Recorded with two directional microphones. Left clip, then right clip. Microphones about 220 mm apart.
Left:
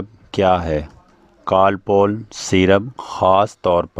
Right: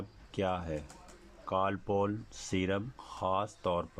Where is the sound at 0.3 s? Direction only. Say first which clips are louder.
Left 19 dB; 45° left (ahead or behind).